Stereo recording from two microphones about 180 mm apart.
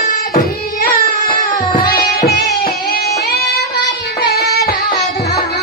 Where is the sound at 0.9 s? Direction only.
55° left (ahead or behind).